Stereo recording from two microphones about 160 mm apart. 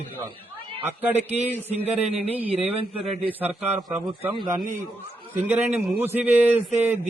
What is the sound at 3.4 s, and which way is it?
Speech, 10° right (ahead or behind).